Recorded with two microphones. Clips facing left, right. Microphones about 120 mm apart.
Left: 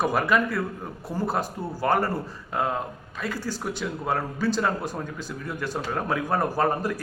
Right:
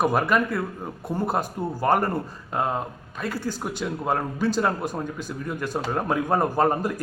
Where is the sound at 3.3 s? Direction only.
15° right (ahead or behind).